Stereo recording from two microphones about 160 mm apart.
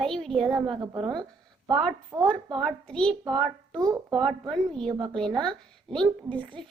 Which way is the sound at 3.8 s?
25° right (ahead or behind).